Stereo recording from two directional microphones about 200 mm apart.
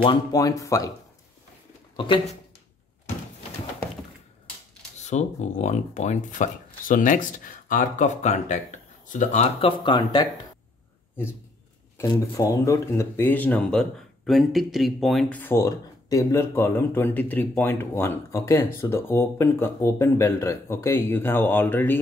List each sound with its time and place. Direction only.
0.0 s speech: 20° left (ahead or behind)
2.0 s speech: 25° left (ahead or behind)
5.0 s speech: 35° left (ahead or behind)
12.0 s speech: 15° left (ahead or behind)